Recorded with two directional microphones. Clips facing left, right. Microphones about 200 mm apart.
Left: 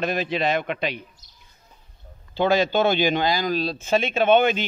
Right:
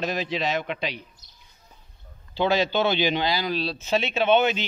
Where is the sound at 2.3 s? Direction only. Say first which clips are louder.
Left 3 dB; 50° left (ahead or behind).